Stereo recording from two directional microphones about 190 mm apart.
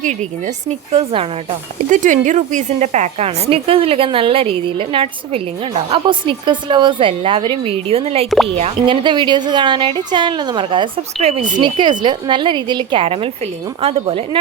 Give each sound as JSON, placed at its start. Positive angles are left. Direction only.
{"t": 0.0, "sound": "a woman's voice", "side_deg": -40}
{"t": 1.9, "sound": "a woman's voice", "side_deg": -40}
{"t": 11.6, "sound": "a woman's voice", "side_deg": -25}